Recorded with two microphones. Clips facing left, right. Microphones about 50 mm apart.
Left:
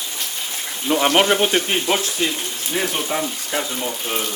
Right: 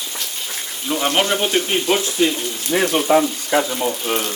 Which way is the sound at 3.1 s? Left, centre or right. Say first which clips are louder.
Right 12 dB; right.